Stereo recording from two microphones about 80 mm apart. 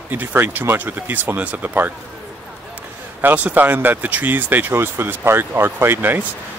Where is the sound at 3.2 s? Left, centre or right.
Right.